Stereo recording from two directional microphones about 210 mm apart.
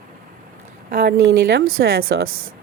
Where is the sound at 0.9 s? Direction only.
45° right (ahead or behind).